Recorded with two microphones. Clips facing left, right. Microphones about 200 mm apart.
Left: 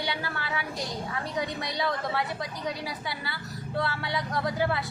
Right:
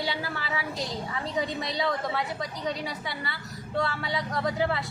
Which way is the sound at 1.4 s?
25° right (ahead or behind).